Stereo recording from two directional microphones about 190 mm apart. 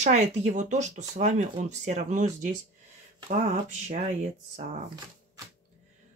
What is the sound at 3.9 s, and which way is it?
Speech, 40° right (ahead or behind).